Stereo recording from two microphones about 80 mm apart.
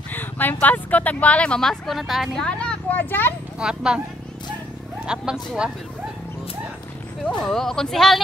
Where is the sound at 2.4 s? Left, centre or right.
Centre.